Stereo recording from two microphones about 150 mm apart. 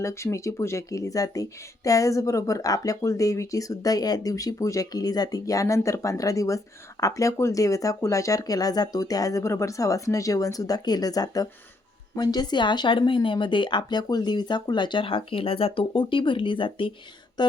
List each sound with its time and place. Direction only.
0.0 s speech: 20° left (ahead or behind); by 16.9 s 35° left (ahead or behind)